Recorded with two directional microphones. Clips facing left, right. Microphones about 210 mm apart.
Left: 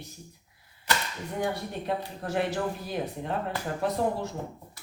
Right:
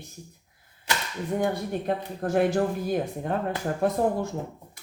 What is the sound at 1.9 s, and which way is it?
Speech, 50° right (ahead or behind).